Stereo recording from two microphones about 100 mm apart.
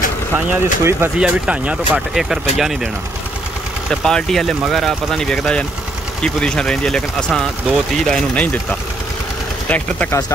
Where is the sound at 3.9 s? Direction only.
5° left (ahead or behind).